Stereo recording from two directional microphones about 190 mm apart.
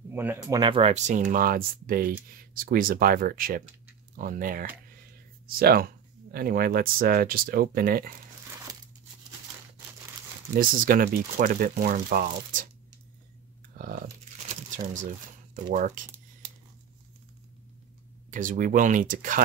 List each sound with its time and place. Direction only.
0.1 s speech: 10° right (ahead or behind)
0.6 s speech: 30° right (ahead or behind)
1.3 s speech: 50° right (ahead or behind)
10.6 s speech: 50° right (ahead or behind)
13.7 s biting: 50° right (ahead or behind)
14.5 s a sound: 40° right (ahead or behind)
15.7 s speech: 45° right (ahead or behind)
18.3 s speech: 45° right (ahead or behind)